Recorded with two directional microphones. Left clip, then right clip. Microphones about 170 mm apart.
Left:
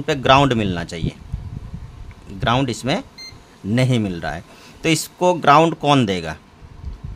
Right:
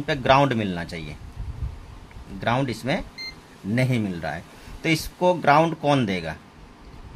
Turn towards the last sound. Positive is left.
turn(degrees=50)  # may be behind; listen again after turning